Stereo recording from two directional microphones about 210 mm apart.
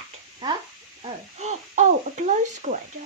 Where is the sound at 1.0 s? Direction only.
35° right (ahead or behind).